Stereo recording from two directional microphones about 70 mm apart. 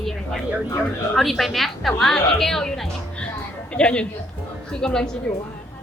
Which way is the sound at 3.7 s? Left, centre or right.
Centre.